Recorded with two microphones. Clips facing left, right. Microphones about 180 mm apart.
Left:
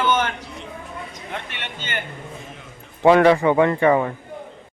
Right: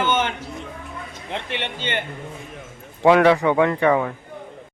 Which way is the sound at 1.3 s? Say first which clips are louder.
Right 6 dB; 25° right (ahead or behind).